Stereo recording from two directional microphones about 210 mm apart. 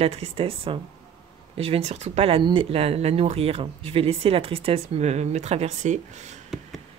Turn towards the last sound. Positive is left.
turn(degrees=-35)  # may be behind; listen again after turning